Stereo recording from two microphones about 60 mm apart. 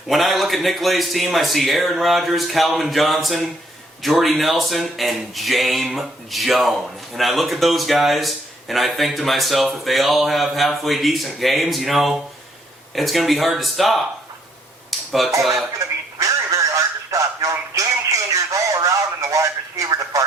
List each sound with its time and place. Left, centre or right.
0.1 s speech: centre
14.8 s cutlery: centre
16.2 s a sound: right
18.3 s radio: right